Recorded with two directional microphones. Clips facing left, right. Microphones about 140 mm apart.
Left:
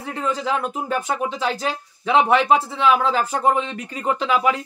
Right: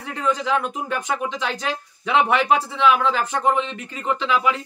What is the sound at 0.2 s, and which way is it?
Speech, 35° left (ahead or behind).